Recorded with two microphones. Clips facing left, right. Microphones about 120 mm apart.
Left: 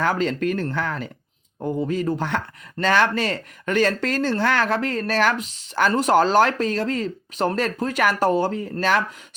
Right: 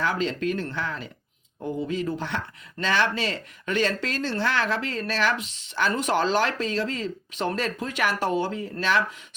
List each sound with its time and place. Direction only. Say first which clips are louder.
0.0 s speech: left 4 dB; 50° left (ahead or behind)